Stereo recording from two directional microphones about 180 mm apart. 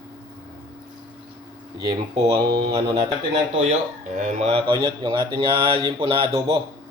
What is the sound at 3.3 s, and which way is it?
Speech, 35° right (ahead or behind).